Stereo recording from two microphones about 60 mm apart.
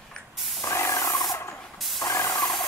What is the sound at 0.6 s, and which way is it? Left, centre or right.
Spray, left.